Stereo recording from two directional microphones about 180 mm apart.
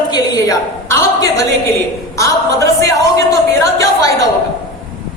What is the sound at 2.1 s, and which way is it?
Speech, 15° left (ahead or behind).